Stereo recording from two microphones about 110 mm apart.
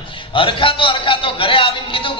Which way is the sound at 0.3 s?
50° left (ahead or behind).